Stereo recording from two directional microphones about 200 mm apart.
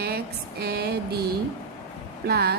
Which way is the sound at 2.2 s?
50° right (ahead or behind).